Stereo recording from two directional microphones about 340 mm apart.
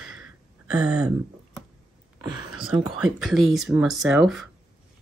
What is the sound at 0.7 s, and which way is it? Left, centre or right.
Speech, centre.